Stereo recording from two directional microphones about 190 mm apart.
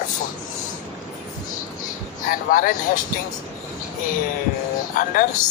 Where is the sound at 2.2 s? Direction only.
45° left (ahead or behind).